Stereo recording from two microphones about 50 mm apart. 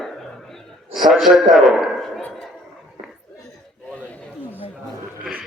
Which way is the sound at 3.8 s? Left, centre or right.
Left.